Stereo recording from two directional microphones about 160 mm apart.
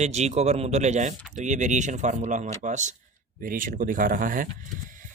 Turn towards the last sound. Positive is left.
turn(degrees=-55)  # may be behind; listen again after turning